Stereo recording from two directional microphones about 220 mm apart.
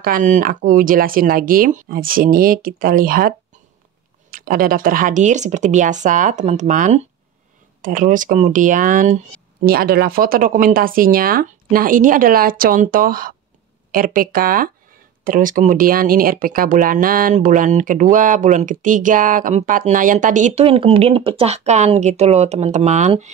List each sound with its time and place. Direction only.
0.0 s speech: 35° right (ahead or behind)